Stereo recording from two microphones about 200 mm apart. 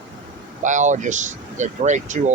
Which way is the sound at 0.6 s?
40° right (ahead or behind).